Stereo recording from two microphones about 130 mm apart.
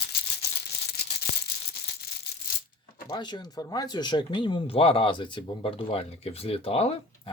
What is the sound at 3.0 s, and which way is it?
Speech, 35° left (ahead or behind).